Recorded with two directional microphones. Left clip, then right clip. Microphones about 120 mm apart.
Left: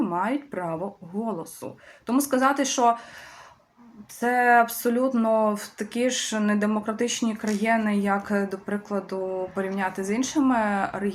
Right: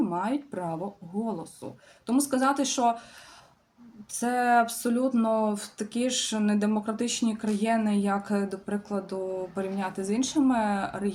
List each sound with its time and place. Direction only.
0.0 s speech: 25° right (ahead or behind)
4.2 s speech: 25° right (ahead or behind)